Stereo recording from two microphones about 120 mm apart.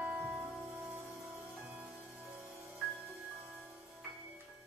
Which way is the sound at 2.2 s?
10° right (ahead or behind).